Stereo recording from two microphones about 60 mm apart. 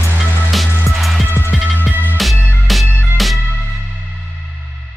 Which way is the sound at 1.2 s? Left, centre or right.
Left.